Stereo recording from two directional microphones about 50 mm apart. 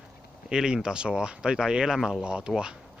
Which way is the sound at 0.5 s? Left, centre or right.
Centre.